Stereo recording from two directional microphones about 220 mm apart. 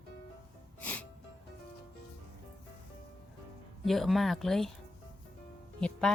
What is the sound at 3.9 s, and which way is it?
Speech, centre (ahead or behind).